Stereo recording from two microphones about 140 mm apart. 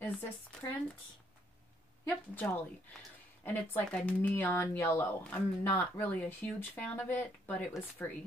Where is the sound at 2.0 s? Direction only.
15° left (ahead or behind).